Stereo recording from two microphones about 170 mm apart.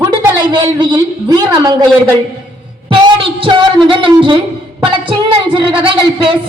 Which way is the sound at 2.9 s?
30° right (ahead or behind).